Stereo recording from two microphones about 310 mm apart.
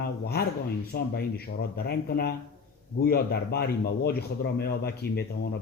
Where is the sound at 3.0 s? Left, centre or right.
Left.